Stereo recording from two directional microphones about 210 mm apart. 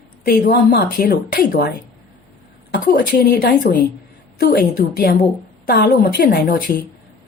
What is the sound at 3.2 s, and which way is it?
A woman's voice, 50° left (ahead or behind).